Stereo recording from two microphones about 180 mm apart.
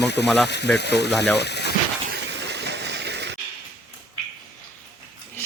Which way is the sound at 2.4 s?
70° right (ahead or behind).